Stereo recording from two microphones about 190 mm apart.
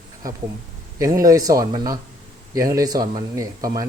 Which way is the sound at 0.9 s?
15° right (ahead or behind).